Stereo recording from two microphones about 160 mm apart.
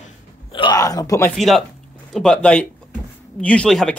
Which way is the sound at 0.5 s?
30° left (ahead or behind).